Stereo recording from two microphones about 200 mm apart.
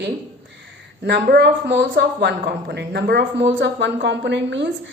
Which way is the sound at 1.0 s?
60° right (ahead or behind).